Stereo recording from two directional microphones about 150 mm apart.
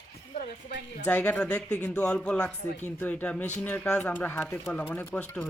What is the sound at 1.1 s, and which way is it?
Speech, 10° left (ahead or behind).